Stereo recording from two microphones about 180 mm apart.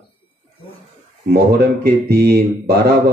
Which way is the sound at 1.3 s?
60° right (ahead or behind).